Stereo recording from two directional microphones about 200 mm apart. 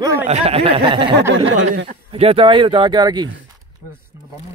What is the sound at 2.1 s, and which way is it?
Speech, 30° right (ahead or behind).